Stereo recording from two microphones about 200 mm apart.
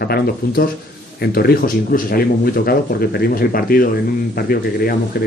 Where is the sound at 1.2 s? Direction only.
50° left (ahead or behind).